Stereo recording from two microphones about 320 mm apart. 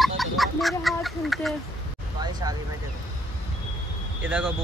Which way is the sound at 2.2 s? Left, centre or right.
Centre.